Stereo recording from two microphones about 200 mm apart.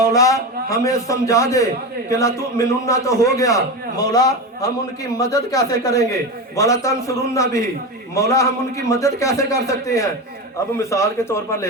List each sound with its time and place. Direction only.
0.0 s a man's voice: 15° left (ahead or behind)